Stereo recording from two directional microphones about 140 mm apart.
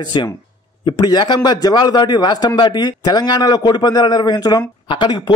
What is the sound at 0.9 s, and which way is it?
A man's voice, 30° left (ahead or behind).